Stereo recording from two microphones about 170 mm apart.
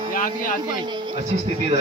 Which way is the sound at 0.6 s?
25° right (ahead or behind).